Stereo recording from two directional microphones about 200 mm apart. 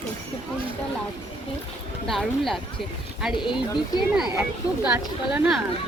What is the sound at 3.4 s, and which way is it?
Speech, 25° left (ahead or behind).